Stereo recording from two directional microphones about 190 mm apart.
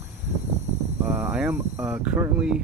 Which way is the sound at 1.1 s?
10° right (ahead or behind).